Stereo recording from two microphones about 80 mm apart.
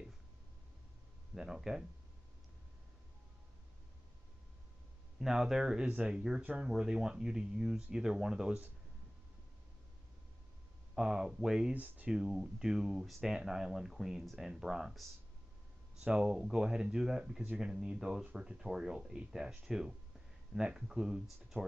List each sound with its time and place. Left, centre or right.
1.3 s speech: centre
5.2 s speech: centre
6.7 s speech: centre
11.0 s speech: centre